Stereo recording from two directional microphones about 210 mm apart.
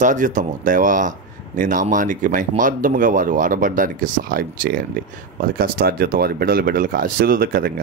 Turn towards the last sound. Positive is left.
turn(degrees=-45)  # may be behind; listen again after turning